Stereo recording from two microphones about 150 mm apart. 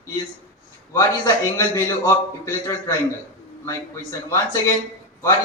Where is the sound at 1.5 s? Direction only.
20° left (ahead or behind).